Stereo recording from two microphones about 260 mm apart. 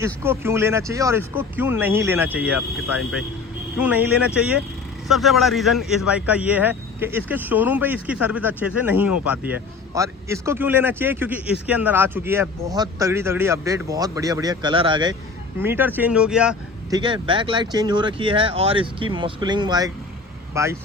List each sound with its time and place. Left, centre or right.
0.0 s a man's voice: centre
15.6 s a man's voice: centre
16.9 s speech: centre